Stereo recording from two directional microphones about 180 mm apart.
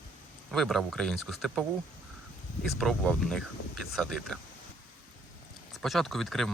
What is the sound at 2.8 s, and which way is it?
Speech, 5° left (ahead or behind).